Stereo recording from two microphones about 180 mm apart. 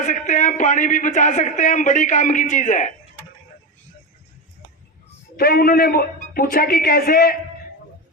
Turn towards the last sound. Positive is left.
turn(degrees=55)  # may be behind; listen again after turning